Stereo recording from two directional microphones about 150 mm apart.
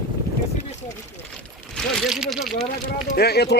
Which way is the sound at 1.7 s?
Centre (ahead or behind).